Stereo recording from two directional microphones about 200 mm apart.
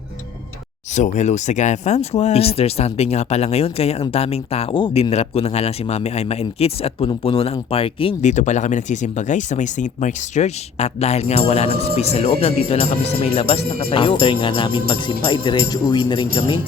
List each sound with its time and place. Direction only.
0.9 s speech: 35° left (ahead or behind)
12.6 s music: 30° left (ahead or behind)